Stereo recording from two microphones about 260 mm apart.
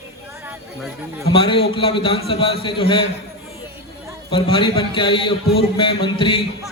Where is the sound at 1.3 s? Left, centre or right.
Centre.